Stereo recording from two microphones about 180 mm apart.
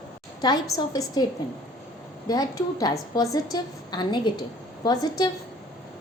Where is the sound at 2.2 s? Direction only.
20° left (ahead or behind).